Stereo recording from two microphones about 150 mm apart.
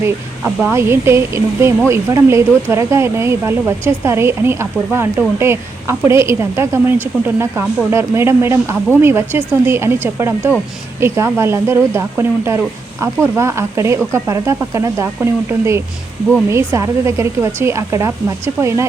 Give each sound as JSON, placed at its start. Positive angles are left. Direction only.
{"t": 0.0, "sound": "speech", "side_deg": -15}